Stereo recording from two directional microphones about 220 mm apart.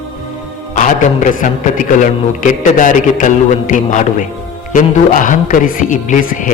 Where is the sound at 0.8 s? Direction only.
35° left (ahead or behind).